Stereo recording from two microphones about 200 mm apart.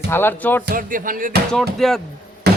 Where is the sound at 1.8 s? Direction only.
Centre (ahead or behind).